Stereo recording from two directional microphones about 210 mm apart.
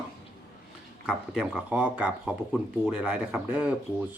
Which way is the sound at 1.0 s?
Centre (ahead or behind).